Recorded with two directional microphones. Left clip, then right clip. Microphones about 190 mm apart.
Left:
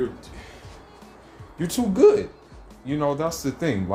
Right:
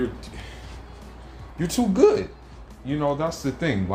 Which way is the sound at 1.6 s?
20° right (ahead or behind).